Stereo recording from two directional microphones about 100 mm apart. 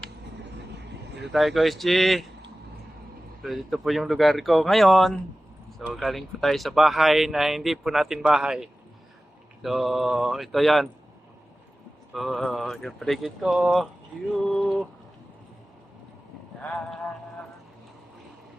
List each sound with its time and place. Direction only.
1.3 s speech: centre (ahead or behind)
3.4 s speech: centre (ahead or behind)
12.1 s speech: centre (ahead or behind)
14.3 s a sound: 5° left (ahead or behind)